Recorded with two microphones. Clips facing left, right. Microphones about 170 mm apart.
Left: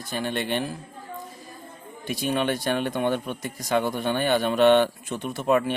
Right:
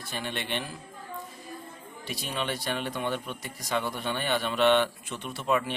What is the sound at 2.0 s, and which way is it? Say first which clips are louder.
Speech: left 8 dB; 50° left (ahead or behind).